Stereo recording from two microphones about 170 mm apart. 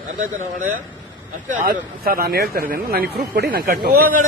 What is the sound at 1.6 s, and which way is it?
Speech, 60° right (ahead or behind).